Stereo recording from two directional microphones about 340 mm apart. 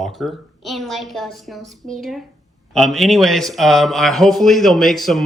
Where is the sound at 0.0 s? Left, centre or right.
Centre.